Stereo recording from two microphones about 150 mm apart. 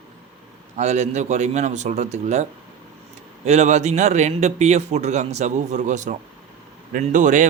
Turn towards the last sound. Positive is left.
turn(degrees=-55)  # may be behind; listen again after turning